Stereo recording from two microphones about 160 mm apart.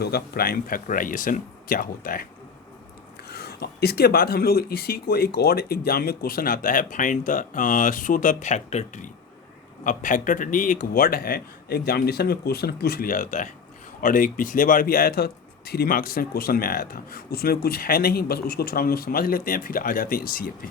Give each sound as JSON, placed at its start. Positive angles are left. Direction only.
{"t": 0.0, "sound": "a man's voice", "side_deg": 80}
{"t": 3.2, "sound": "a man's voice", "side_deg": 85}